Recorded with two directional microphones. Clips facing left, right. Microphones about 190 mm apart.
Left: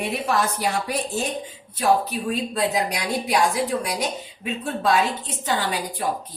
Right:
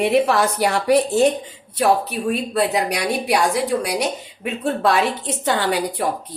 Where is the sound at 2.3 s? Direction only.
65° right (ahead or behind).